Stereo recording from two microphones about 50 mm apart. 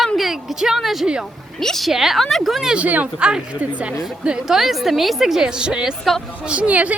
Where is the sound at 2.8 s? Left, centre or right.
Right.